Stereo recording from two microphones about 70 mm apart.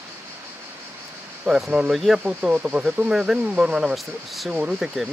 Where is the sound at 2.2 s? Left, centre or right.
Centre.